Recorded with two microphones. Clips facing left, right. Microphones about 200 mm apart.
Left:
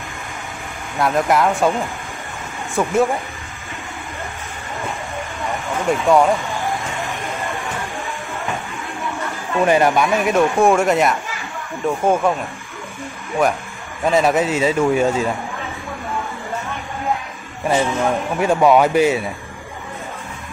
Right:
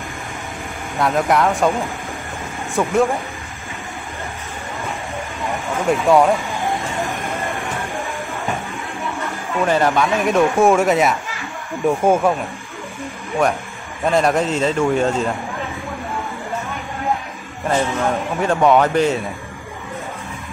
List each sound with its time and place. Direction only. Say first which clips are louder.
0.9 s a man's voice: even; centre (ahead or behind)
2.7 s a man's voice: even; centre (ahead or behind)
5.9 s a man's voice: right 1 dB; centre (ahead or behind)
9.7 s speech: left 2 dB; 15° left (ahead or behind)
10.2 s a man's voice: right 2 dB; centre (ahead or behind)
14.0 s a man's voice: left 1 dB; 5° left (ahead or behind)
17.6 s speech: left 1 dB; 10° left (ahead or behind)